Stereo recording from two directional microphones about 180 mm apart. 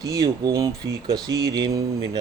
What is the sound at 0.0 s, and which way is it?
A man's voice, 20° right (ahead or behind).